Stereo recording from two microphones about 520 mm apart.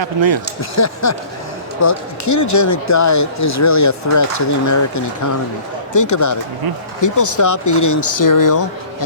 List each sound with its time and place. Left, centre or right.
0.0 s speech: right
0.6 s speech: left